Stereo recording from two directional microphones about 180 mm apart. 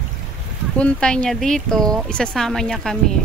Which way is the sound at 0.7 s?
5° left (ahead or behind).